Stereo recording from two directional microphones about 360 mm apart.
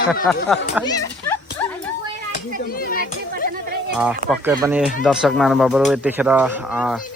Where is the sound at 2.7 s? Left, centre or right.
Left.